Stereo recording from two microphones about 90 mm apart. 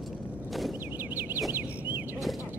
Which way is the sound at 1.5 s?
20° right (ahead or behind).